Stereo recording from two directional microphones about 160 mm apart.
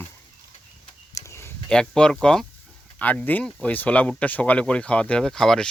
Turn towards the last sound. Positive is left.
turn(degrees=5)  # may be behind; listen again after turning